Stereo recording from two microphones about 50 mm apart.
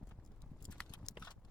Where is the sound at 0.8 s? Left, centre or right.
Left.